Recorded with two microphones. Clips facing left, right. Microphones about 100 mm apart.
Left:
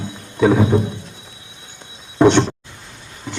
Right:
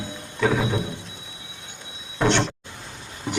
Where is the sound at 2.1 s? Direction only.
20° left (ahead or behind).